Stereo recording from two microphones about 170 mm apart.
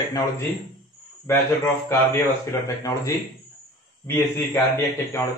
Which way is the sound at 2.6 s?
20° left (ahead or behind).